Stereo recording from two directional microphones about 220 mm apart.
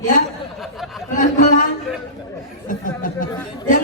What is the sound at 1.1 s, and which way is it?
Speech, 35° left (ahead or behind).